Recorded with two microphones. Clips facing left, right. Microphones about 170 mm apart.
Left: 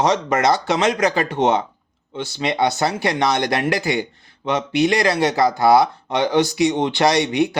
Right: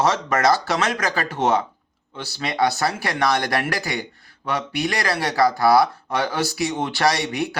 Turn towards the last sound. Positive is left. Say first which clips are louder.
# left 5 dB
turn(degrees=20)  # may be behind; listen again after turning